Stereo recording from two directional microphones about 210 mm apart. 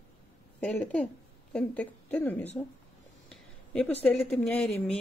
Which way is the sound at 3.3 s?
5° left (ahead or behind).